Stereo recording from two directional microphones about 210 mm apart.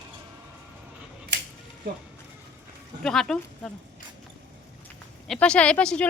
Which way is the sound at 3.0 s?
Centre (ahead or behind).